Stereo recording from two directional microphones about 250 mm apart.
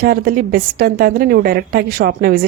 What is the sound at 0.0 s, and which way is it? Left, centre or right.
A woman's voice, right.